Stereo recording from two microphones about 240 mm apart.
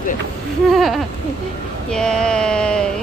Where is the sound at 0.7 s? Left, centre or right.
Centre.